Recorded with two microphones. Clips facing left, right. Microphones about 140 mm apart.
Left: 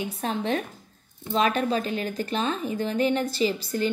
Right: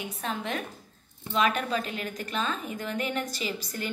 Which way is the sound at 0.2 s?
30° left (ahead or behind).